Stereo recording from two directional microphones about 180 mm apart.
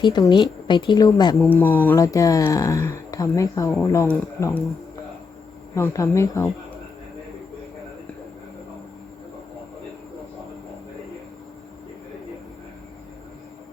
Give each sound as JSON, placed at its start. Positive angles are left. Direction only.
{"t": 0.0, "sound": "speech", "side_deg": 25}
{"t": 5.7, "sound": "speech", "side_deg": 15}